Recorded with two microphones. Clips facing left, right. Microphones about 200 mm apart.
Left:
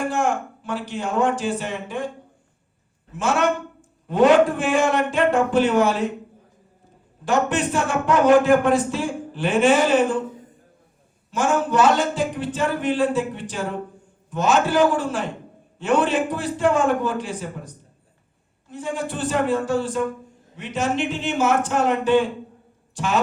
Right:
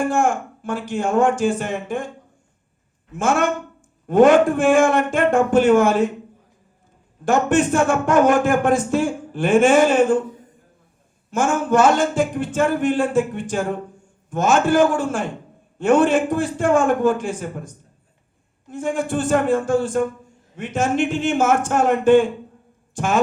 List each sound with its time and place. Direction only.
0.1 s a man's voice: 50° right (ahead or behind)
3.1 s a man's voice: 50° right (ahead or behind)
7.3 s a man's voice: 50° right (ahead or behind)
11.3 s a man's voice: 50° right (ahead or behind)
18.7 s a man's voice: 50° right (ahead or behind)